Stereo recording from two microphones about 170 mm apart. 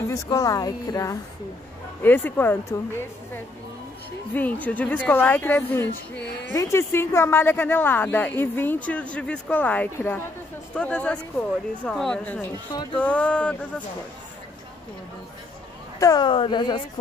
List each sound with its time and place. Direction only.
0.1 s speech: 20° left (ahead or behind)
4.3 s speech: 10° left (ahead or behind)
16.0 s speech: 25° left (ahead or behind)